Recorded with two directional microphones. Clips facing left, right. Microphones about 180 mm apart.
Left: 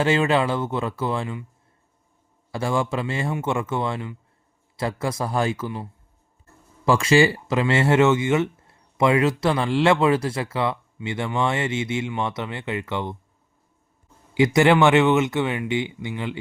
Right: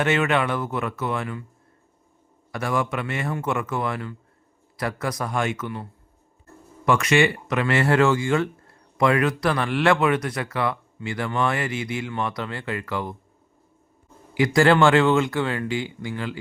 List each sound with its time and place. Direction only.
0.0 s speech: 30° left (ahead or behind)
2.5 s speech: 30° left (ahead or behind)
14.3 s speech: 20° left (ahead or behind)